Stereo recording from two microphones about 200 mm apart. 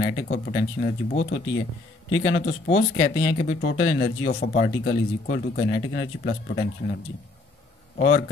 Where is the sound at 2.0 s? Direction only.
75° left (ahead or behind).